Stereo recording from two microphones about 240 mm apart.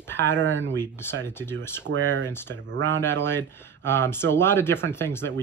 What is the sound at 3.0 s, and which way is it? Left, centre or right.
Speech, centre.